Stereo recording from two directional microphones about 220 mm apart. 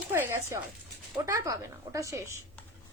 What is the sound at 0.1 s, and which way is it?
A woman's voice, 10° right (ahead or behind).